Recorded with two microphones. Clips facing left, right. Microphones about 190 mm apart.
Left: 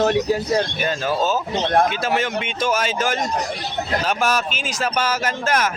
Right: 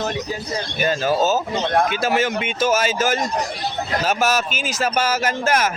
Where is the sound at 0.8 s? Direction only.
5° right (ahead or behind).